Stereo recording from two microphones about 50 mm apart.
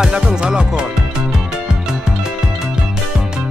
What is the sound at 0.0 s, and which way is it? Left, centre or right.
Music, centre.